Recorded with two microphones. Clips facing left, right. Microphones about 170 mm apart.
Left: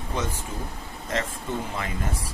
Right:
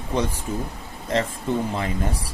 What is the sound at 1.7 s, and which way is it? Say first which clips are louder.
Speech: right 5 dB; 35° right (ahead or behind).